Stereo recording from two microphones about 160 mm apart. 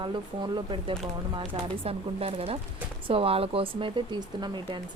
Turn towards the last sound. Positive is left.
turn(degrees=-30)  # may be behind; listen again after turning